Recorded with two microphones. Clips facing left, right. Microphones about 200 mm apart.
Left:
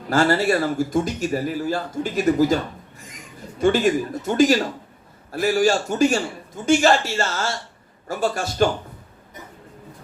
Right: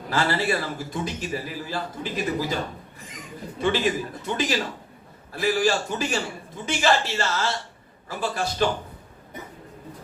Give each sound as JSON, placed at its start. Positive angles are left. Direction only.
{"t": 0.1, "sound": "a man's voice", "side_deg": 45}
{"t": 3.6, "sound": "a man's voice", "side_deg": 45}